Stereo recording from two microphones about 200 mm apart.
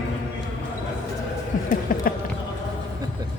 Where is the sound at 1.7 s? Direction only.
45° left (ahead or behind).